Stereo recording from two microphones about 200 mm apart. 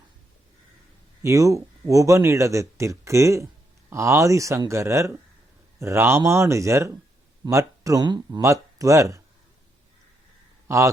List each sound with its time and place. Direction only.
1.2 s speech: 15° right (ahead or behind)